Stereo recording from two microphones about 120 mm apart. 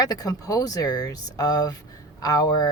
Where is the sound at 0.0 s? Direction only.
35° left (ahead or behind).